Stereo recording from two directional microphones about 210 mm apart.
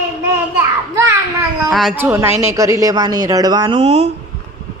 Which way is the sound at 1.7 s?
5° right (ahead or behind).